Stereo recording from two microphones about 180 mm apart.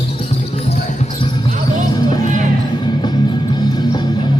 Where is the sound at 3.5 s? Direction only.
25° left (ahead or behind).